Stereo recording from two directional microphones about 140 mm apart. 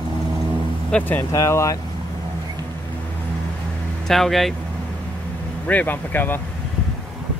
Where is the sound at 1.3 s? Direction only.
20° left (ahead or behind).